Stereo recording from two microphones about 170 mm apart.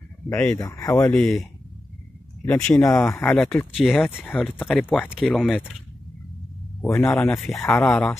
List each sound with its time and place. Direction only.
0.3 s speech: 10° left (ahead or behind)
1.1 s speech: 5° left (ahead or behind)
2.8 s speech: 20° left (ahead or behind)
6.8 s speech: 10° left (ahead or behind)